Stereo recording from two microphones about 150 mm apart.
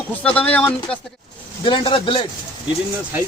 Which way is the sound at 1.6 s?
35° left (ahead or behind).